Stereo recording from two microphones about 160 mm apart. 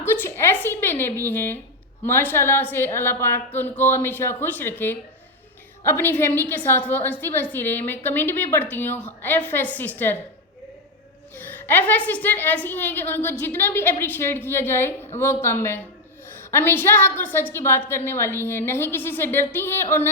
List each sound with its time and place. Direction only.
0.0 s a woman's voice: 15° left (ahead or behind)
11.3 s a woman's voice: 10° left (ahead or behind)